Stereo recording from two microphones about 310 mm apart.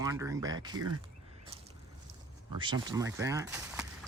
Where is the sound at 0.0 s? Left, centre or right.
Centre.